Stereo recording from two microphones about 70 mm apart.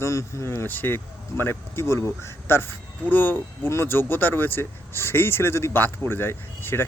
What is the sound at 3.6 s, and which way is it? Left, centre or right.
Speech, left.